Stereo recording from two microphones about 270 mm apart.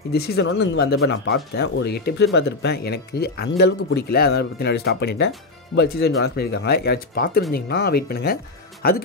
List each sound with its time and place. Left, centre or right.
0.1 s speech: left